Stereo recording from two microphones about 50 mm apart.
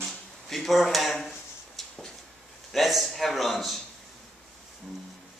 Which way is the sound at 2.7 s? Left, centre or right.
Centre.